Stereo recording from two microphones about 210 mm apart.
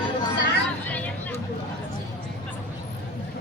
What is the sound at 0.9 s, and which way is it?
Music, 10° left (ahead or behind).